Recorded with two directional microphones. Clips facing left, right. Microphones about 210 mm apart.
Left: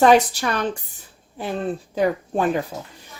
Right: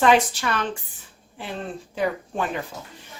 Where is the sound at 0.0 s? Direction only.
40° left (ahead or behind).